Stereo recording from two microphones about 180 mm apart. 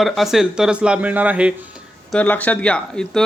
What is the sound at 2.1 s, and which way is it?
Speech, 10° left (ahead or behind).